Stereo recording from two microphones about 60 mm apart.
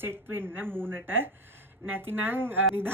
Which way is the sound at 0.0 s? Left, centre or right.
Right.